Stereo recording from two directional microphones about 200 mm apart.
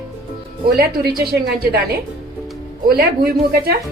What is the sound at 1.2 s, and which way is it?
Speech, 50° right (ahead or behind).